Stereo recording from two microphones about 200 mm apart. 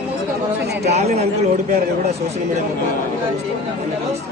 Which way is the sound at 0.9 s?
35° right (ahead or behind).